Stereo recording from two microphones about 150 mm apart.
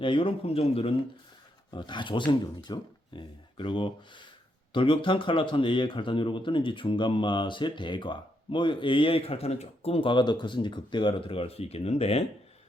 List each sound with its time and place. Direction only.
0.0 s speech: 35° left (ahead or behind)